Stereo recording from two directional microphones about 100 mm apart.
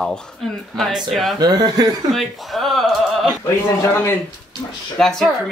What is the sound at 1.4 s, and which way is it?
Speech, 45° right (ahead or behind).